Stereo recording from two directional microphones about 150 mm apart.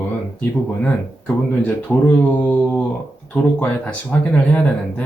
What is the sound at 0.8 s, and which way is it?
Speech, 10° left (ahead or behind).